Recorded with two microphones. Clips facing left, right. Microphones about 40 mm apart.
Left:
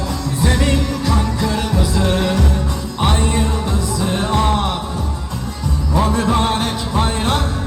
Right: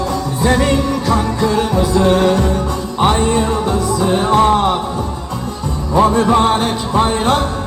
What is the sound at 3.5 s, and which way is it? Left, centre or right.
Music, right.